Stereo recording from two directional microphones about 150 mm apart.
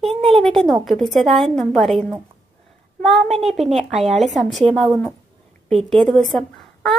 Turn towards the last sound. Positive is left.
turn(degrees=0)  # may be behind; listen again after turning